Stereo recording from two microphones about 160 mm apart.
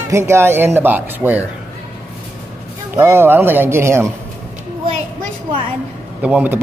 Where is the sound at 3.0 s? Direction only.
15° right (ahead or behind).